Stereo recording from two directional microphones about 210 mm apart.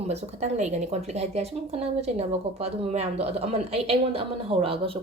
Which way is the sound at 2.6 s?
30° right (ahead or behind).